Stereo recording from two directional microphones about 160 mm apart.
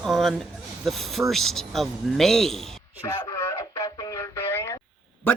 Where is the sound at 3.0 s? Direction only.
20° left (ahead or behind).